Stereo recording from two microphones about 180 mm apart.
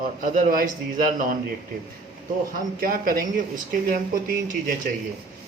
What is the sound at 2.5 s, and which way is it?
Speech, 50° right (ahead or behind).